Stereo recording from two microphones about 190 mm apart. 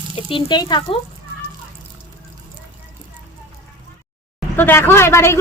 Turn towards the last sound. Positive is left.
turn(degrees=15)  # may be behind; listen again after turning